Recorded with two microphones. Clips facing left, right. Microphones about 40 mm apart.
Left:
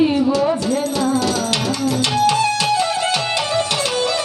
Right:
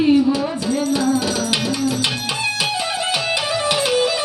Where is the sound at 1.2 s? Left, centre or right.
Centre.